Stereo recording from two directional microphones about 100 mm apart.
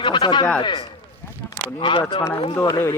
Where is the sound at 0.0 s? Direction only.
55° left (ahead or behind).